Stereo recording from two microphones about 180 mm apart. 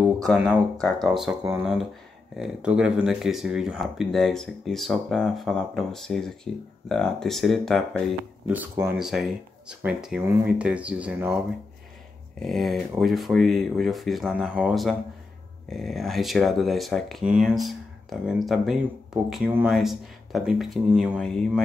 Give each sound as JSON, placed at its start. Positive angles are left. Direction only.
{"t": 0.0, "sound": "speech", "side_deg": 0}
{"t": 8.5, "sound": "speech", "side_deg": -10}